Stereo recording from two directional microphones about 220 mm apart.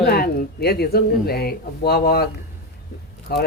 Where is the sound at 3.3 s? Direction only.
45° left (ahead or behind).